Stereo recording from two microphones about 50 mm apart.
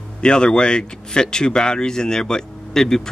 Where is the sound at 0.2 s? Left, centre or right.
Centre.